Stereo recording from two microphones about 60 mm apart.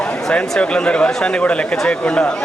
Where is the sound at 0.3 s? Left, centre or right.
Centre.